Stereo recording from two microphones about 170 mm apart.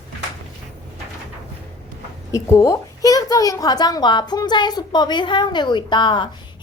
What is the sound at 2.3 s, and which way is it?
A woman's voice, 15° left (ahead or behind).